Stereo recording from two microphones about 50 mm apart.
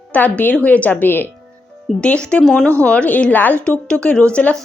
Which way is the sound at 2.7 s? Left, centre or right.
Left.